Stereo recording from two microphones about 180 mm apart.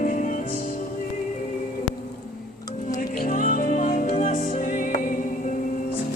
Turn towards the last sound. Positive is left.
turn(degrees=45)  # may be behind; listen again after turning